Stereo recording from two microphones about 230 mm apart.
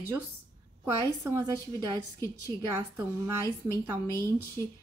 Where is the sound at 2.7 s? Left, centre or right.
Centre.